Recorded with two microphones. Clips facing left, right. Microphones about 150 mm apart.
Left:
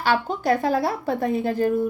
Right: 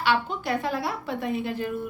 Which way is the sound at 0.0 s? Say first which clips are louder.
Left 3 dB; 40° left (ahead or behind).